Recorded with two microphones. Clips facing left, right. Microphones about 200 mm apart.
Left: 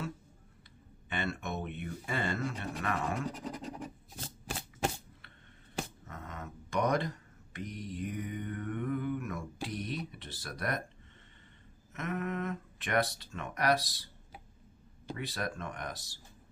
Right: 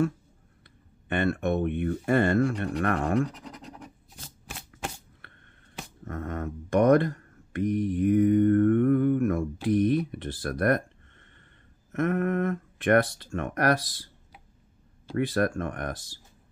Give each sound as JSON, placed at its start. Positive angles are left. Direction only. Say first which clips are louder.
{"t": 1.0, "sound": "speech", "louder": "right 11 dB", "side_deg": -55}
{"t": 3.4, "sound": "scratch", "louder": "left 3 dB", "side_deg": 10}
{"t": 4.5, "sound": "shuffling cards", "louder": "left 3 dB", "side_deg": 35}
{"t": 6.0, "sound": "speech", "louder": "right 12 dB", "side_deg": -55}
{"t": 11.9, "sound": "speech", "louder": "right 10 dB", "side_deg": -55}
{"t": 15.1, "sound": "speech", "louder": "right 13 dB", "side_deg": -55}